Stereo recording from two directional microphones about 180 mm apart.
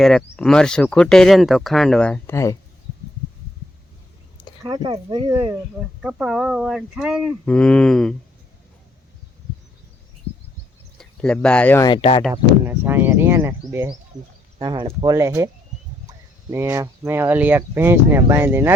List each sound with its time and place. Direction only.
0.0 s speech: 5° left (ahead or behind)
4.6 s speech: 25° right (ahead or behind)
6.0 s speech: 5° right (ahead or behind)
10.9 s speech: 5° left (ahead or behind)
12.3 s speech: 10° right (ahead or behind)
14.6 s speech: 25° right (ahead or behind)
16.5 s speech: 15° right (ahead or behind)